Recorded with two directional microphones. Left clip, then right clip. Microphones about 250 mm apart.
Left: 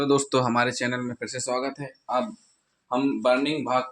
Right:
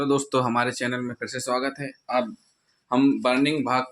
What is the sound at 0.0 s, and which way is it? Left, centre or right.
Speech, centre.